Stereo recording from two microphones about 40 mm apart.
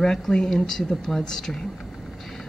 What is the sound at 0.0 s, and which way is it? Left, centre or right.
Speech, centre.